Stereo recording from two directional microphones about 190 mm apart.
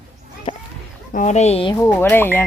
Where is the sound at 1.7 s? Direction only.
10° left (ahead or behind).